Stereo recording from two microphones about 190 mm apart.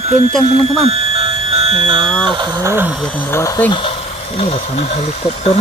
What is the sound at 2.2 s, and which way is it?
Speech, 25° right (ahead or behind).